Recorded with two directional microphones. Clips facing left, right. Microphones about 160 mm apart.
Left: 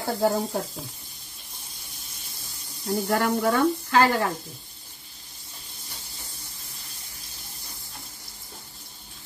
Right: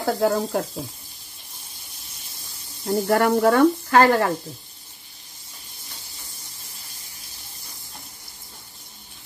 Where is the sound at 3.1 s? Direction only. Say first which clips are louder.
Right 6 dB; 60° right (ahead or behind).